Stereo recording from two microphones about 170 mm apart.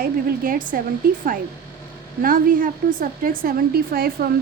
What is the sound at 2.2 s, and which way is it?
A woman's voice, 55° right (ahead or behind).